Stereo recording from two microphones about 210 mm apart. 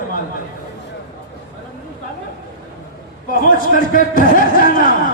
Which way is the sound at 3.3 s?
40° left (ahead or behind).